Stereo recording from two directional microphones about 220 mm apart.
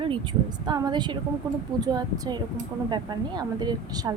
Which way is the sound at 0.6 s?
20° right (ahead or behind).